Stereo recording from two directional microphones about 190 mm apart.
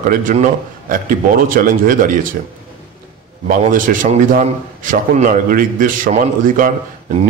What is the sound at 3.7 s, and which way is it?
A man's voice, 45° right (ahead or behind).